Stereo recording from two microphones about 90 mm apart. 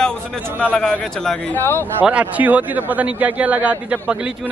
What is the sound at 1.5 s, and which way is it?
Speech, 25° left (ahead or behind).